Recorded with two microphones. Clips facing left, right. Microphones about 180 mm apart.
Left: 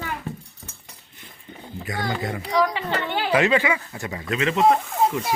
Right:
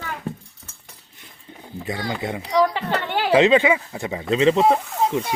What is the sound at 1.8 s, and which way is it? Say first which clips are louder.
Speech: right 1 dB; 25° right (ahead or behind).